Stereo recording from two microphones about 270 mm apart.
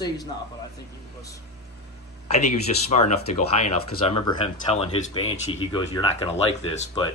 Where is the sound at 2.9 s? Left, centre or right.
Left.